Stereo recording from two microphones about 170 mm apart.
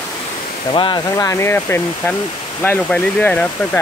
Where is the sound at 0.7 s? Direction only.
25° left (ahead or behind).